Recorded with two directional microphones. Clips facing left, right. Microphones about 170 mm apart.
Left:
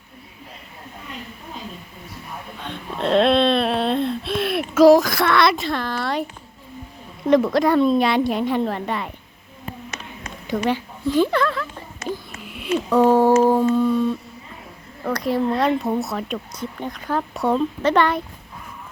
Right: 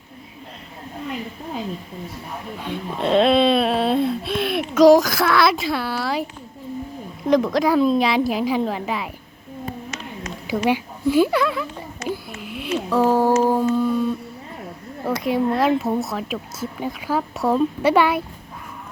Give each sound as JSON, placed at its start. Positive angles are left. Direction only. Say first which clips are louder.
{"t": 2.6, "sound": "speech", "louder": "right 1 dB", "side_deg": 0}
{"t": 7.3, "sound": "speech", "louder": "left 1 dB", "side_deg": 0}
{"t": 10.4, "sound": "speech", "louder": "right 1 dB", "side_deg": -10}
{"t": 12.0, "sound": "a sound", "louder": "right 1 dB", "side_deg": -5}
{"t": 13.7, "sound": "speech", "louder": "left 1 dB", "side_deg": -5}